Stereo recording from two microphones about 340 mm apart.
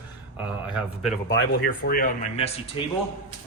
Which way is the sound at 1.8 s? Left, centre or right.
Left.